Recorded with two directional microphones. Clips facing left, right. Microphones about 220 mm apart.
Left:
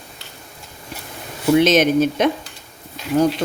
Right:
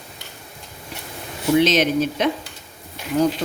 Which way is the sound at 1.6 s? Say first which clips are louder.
Left 3 dB; 50° left (ahead or behind).